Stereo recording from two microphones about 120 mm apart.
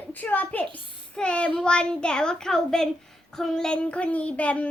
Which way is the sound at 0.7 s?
10° left (ahead or behind).